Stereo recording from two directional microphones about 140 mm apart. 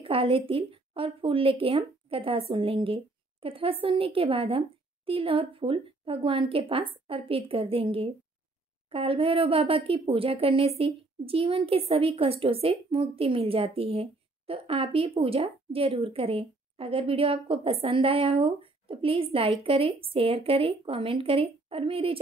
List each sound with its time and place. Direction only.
0.0 s a woman's voice: 40° right (ahead or behind)